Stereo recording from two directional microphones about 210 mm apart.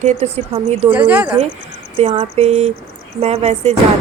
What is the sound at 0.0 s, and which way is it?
Speech, 30° right (ahead or behind).